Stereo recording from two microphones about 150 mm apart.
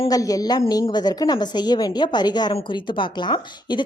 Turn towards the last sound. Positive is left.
turn(degrees=30)  # may be behind; listen again after turning